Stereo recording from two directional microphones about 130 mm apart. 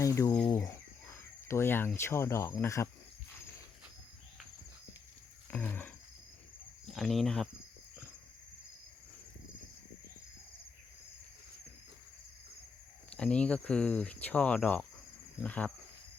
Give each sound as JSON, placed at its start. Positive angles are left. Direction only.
{"t": 0.0, "sound": "speech", "side_deg": 25}
{"t": 5.5, "sound": "a sound", "side_deg": 15}
{"t": 6.8, "sound": "speech", "side_deg": 0}
{"t": 13.1, "sound": "speech", "side_deg": 5}